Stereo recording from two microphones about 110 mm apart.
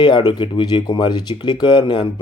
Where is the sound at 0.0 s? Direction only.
45° left (ahead or behind).